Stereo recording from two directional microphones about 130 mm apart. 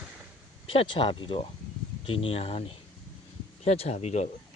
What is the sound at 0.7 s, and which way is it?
Speech, 40° left (ahead or behind).